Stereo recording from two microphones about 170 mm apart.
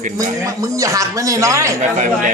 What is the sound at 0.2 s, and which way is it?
Speech, 20° right (ahead or behind).